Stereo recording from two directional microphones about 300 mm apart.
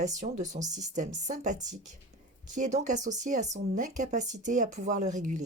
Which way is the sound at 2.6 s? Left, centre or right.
Right.